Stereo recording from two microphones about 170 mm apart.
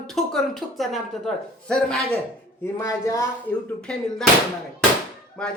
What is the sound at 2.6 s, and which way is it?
Speech, 15° left (ahead or behind).